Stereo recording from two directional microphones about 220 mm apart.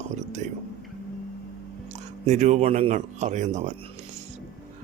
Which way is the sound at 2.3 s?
35° right (ahead or behind).